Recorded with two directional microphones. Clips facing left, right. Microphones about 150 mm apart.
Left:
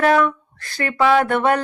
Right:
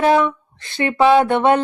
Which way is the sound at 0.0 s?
25° right (ahead or behind).